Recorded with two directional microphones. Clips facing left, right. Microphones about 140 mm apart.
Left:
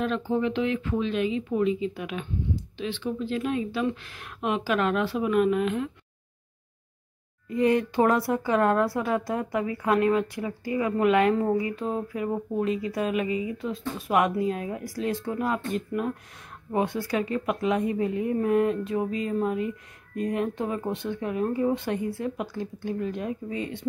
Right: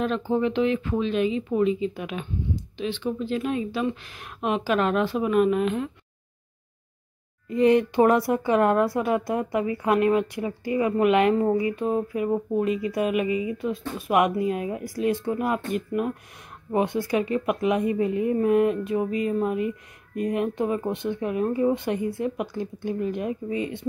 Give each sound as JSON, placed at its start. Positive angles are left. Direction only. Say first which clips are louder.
{"t": 0.0, "sound": "speech", "louder": "right 2 dB", "side_deg": -30}
{"t": 7.4, "sound": "speech", "louder": "right 4 dB", "side_deg": -20}